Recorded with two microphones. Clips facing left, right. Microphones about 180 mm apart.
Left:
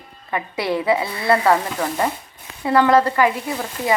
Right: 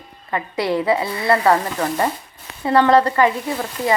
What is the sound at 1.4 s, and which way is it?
Speech, centre (ahead or behind).